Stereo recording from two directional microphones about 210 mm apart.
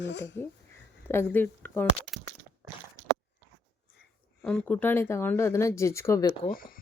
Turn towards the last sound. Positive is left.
turn(degrees=40)  # may be behind; listen again after turning